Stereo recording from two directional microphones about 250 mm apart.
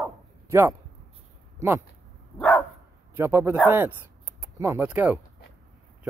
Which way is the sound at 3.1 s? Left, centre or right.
Centre.